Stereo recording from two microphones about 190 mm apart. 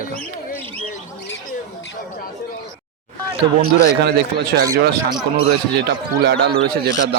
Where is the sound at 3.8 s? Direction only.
55° right (ahead or behind).